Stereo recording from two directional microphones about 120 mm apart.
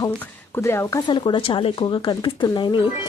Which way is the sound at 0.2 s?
20° left (ahead or behind).